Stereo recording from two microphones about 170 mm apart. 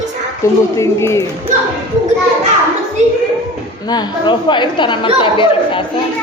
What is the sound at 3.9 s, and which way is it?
Speech, 25° left (ahead or behind).